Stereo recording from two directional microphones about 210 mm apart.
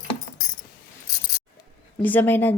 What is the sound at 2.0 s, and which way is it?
Speech, 10° left (ahead or behind).